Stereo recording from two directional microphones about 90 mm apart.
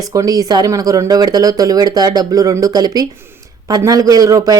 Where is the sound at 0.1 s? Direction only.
40° right (ahead or behind).